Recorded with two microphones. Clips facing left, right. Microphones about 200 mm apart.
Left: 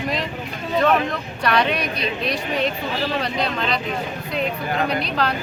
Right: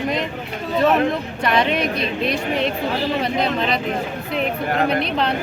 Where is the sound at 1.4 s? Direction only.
25° right (ahead or behind).